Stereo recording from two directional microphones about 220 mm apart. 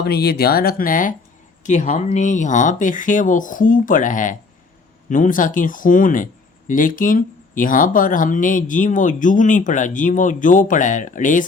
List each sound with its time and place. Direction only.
0.0 s speech: 45° left (ahead or behind)